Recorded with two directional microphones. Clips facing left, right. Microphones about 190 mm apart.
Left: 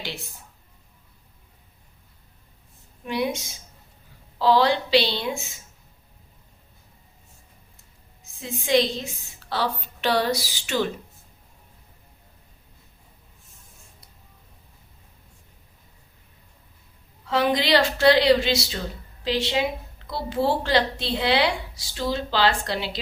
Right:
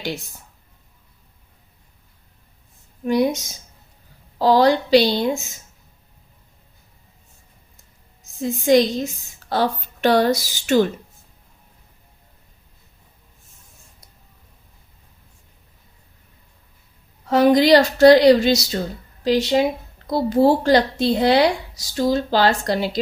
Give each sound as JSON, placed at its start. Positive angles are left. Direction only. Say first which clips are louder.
{"t": 3.0, "sound": "a woman's voice", "louder": "right 7 dB", "side_deg": -40}
{"t": 8.2, "sound": "a woman's voice", "louder": "right 10 dB", "side_deg": -40}
{"t": 17.2, "sound": "a woman's voice", "louder": "right 8 dB", "side_deg": -45}